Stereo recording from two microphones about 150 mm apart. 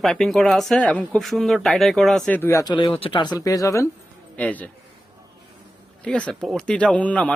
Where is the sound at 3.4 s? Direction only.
25° left (ahead or behind).